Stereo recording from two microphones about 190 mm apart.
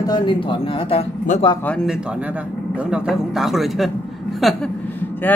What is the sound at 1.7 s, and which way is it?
Speech, 5° left (ahead or behind).